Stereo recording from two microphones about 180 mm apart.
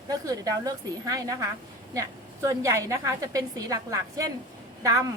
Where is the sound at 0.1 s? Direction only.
20° right (ahead or behind).